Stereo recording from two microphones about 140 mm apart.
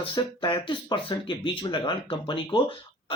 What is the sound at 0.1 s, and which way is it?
Speech, 35° left (ahead or behind).